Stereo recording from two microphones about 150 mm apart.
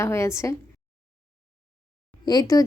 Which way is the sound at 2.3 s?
25° left (ahead or behind).